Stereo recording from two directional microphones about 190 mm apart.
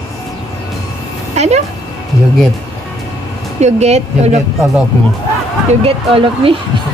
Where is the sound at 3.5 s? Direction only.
35° right (ahead or behind).